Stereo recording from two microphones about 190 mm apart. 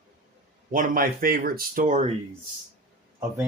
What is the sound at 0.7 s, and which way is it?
Speech, 45° right (ahead or behind).